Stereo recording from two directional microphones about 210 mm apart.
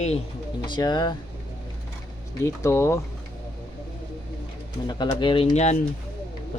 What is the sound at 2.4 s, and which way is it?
Speech, 15° left (ahead or behind).